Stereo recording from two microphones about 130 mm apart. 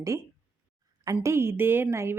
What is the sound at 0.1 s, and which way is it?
A woman's voice, 20° right (ahead or behind).